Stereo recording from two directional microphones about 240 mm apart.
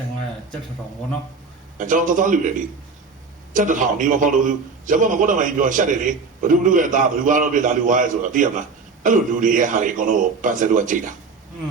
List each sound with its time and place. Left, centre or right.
1.8 s a man's voice: right
3.5 s a man's voice: right